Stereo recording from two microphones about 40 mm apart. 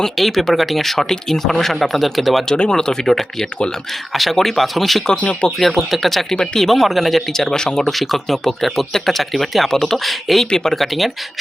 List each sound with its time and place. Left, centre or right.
0.0 s speech: centre
2.5 s speech: centre
5.0 s speech: left
5.5 s speech: centre
6.3 s speech: centre
6.7 s speech: centre
7.3 s speech: centre
7.9 s speech: centre
10.5 s speech: centre
10.8 s speech: centre